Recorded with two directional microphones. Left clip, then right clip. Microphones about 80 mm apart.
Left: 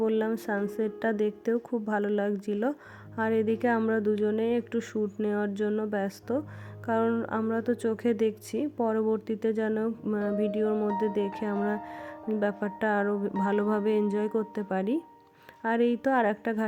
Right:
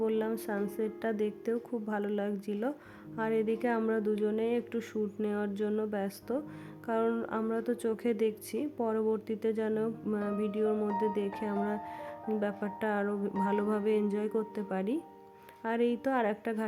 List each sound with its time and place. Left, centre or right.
0.0 s a woman's voice: left